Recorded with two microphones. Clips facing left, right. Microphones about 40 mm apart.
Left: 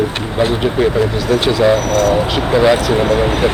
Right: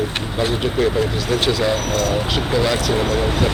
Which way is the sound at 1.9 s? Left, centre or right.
Left.